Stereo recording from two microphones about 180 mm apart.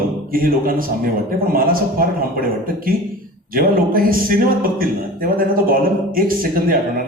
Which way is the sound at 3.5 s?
55° right (ahead or behind).